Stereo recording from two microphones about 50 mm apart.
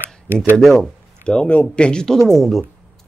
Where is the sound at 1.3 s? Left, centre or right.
Left.